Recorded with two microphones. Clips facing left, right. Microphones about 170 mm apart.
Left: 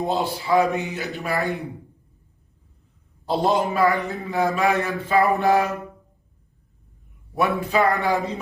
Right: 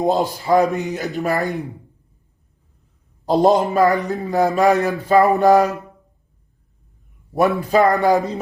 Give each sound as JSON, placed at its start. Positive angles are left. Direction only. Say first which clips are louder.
{"t": 0.0, "sound": "a man's voice", "louder": "right 5 dB", "side_deg": -40}
{"t": 3.2, "sound": "a man's voice", "louder": "right 6 dB", "side_deg": -40}
{"t": 7.6, "sound": "a man's voice", "louder": "right 6 dB", "side_deg": -40}